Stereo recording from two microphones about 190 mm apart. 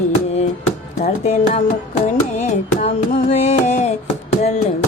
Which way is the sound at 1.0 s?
40° left (ahead or behind).